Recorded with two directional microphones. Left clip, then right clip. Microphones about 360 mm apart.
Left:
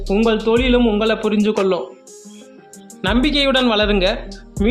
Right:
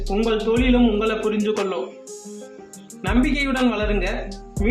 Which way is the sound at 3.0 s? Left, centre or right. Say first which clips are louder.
Left 5 dB; left.